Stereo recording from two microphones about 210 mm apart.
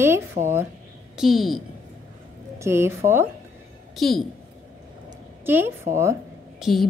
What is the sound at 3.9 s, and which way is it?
Speech, centre (ahead or behind).